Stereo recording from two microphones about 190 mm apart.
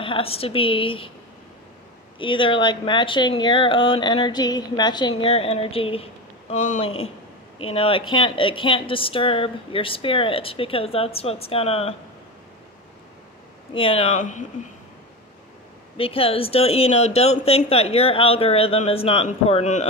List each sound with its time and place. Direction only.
0.0 s speech: 30° left (ahead or behind)
2.1 s speech: 25° left (ahead or behind)
7.7 s speech: 30° left (ahead or behind)
13.7 s speech: 30° left (ahead or behind)
16.0 s speech: 30° left (ahead or behind)